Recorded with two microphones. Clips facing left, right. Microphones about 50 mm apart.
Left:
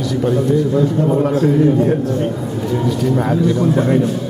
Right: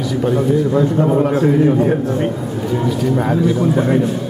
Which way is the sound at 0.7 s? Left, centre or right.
Centre.